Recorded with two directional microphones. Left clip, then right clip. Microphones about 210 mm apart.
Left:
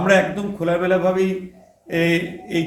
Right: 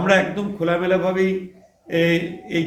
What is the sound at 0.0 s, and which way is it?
A man's voice, 35° right (ahead or behind).